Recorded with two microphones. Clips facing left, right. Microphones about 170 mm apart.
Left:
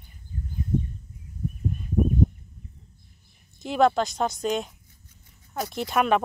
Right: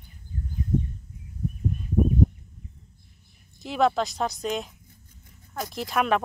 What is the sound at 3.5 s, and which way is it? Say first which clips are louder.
Speech: left 2 dB; centre (ahead or behind).